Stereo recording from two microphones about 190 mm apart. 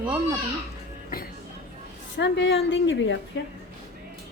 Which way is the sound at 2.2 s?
70° left (ahead or behind).